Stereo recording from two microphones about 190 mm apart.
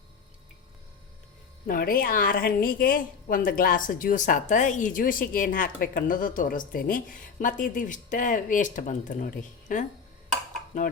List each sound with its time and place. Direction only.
1.6 s a woman's voice: 50° left (ahead or behind)